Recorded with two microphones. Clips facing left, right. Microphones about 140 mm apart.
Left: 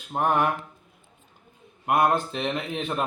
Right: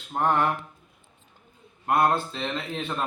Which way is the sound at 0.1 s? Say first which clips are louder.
Even; 15° left (ahead or behind).